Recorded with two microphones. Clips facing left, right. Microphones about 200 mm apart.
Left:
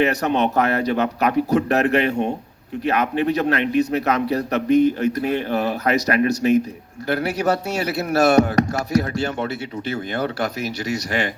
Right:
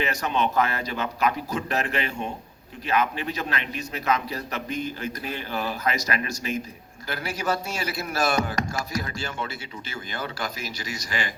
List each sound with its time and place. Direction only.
0.0 s a man's voice: 65° left (ahead or behind)